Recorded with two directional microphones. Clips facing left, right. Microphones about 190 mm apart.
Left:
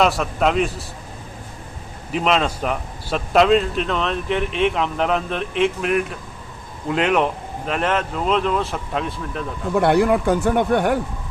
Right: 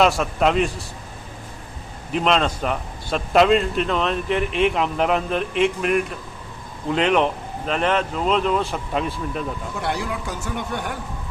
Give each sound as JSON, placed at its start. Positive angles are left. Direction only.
{"t": 0.0, "sound": "a man's voice", "side_deg": 0}
{"t": 2.1, "sound": "a man's voice", "side_deg": 5}
{"t": 9.7, "sound": "speech", "side_deg": 55}